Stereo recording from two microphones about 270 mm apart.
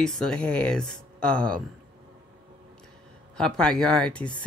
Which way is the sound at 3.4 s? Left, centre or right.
Centre.